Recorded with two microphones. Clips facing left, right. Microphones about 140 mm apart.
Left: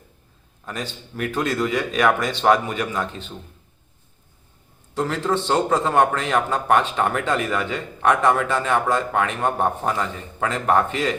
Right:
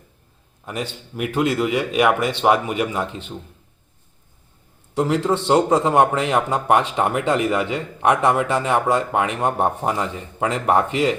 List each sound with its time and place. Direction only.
0.6 s a man's voice: 15° right (ahead or behind)
4.9 s a man's voice: 15° right (ahead or behind)